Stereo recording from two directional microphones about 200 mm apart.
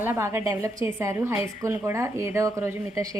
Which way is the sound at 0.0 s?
10° right (ahead or behind).